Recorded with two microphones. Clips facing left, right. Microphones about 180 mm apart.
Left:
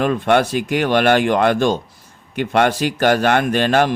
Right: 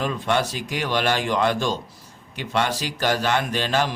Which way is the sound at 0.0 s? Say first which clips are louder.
Left 7 dB; 60° left (ahead or behind).